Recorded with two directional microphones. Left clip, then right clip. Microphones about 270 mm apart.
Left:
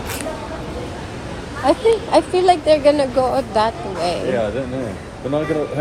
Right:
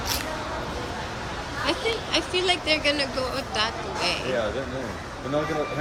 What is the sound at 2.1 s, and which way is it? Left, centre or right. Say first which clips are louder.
Speech: left 8 dB; centre.